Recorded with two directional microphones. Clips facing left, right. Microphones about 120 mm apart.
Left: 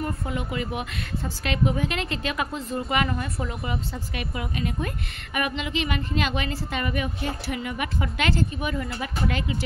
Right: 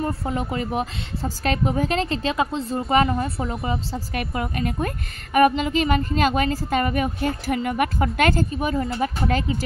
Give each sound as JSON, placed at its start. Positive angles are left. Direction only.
{"t": 0.0, "sound": "speech", "side_deg": -35}
{"t": 4.1, "sound": "a woman's voice", "side_deg": -50}